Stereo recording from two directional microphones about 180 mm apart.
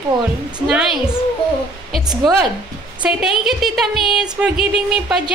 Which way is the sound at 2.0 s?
20° right (ahead or behind).